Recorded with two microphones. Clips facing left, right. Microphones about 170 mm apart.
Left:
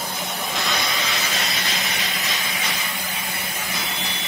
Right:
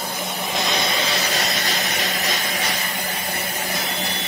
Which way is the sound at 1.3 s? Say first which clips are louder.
Right 3 dB; 40° right (ahead or behind).